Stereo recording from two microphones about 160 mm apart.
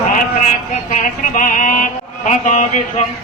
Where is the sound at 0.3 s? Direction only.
55° left (ahead or behind).